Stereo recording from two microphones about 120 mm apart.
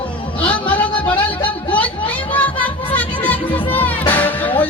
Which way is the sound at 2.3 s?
15° left (ahead or behind).